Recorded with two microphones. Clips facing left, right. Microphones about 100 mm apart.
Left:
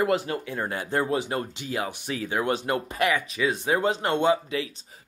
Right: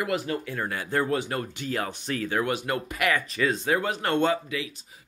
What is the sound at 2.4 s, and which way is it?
Speech, 25° left (ahead or behind).